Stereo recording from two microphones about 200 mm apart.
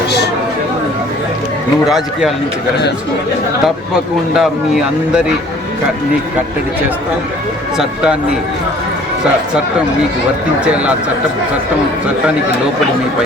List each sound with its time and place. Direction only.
4.4 s speech: centre (ahead or behind)
7.8 s speech: 5° right (ahead or behind)